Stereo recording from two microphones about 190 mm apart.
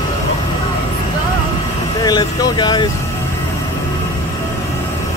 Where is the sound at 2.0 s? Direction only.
20° left (ahead or behind).